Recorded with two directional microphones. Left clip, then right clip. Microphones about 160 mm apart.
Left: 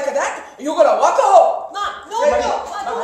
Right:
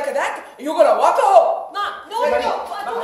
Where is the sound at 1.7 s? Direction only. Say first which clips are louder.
Left 1 dB; centre (ahead or behind).